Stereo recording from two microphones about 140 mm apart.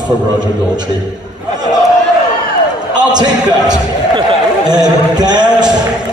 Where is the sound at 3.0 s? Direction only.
30° right (ahead or behind).